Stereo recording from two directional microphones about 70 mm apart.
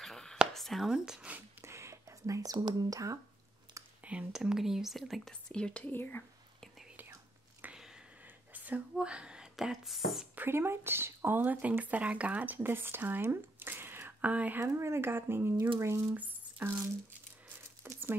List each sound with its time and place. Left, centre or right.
0.0 s whispering: centre
0.6 s speech: centre
1.6 s whispering: right
4.0 s speech: centre
5.5 s speech: centre
5.9 s speech: left
7.7 s a sound: centre
8.5 s a sound: right
8.9 s speech: centre
10.3 s speech: right
14.2 s speech: right
14.7 s speech: right
17.8 s crumpling: right